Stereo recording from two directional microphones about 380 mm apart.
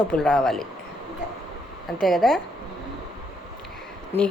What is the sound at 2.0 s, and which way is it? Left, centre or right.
Speech, centre.